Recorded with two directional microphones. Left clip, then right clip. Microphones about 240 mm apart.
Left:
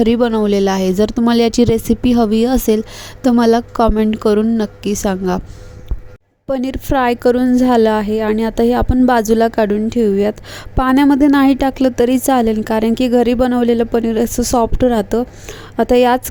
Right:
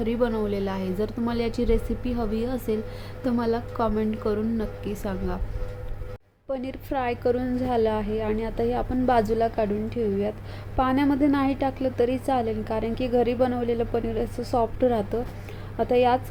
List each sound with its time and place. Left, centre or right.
0.0 s a woman's voice: left
6.5 s a woman's voice: left